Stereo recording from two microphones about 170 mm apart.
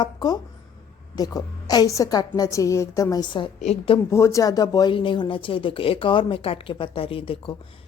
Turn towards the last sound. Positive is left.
turn(degrees=30)  # may be behind; listen again after turning